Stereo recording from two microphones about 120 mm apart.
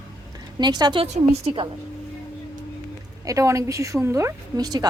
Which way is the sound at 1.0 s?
60° right (ahead or behind).